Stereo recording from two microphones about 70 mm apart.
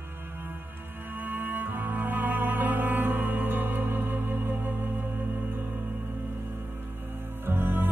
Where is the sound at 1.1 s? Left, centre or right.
Right.